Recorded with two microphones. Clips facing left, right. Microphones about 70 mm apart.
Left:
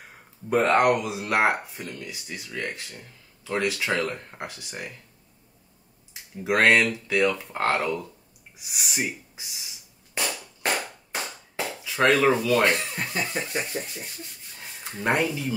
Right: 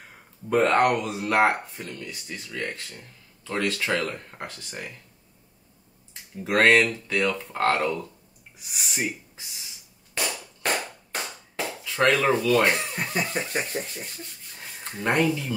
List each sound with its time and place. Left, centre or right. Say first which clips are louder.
0.5 s speech: even; centre
6.3 s speech: right 1 dB; centre
10.6 s a sound: even; centre
12.3 s speech: even; centre
12.9 s speech: right 2 dB; centre
13.2 s a sound: right 1 dB; centre
13.5 s speech: right 1 dB; right
14.9 s speech: even; centre